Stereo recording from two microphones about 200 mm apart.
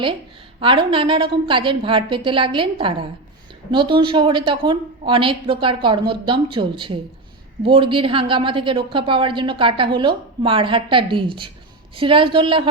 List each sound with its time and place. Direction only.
0.6 s a woman's voice: 25° right (ahead or behind)